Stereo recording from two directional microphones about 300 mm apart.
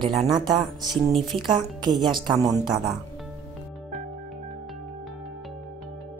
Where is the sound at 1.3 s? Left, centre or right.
Centre.